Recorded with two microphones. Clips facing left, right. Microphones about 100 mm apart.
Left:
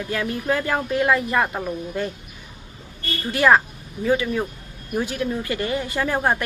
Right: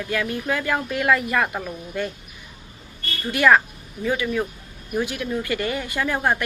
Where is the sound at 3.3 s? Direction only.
30° left (ahead or behind).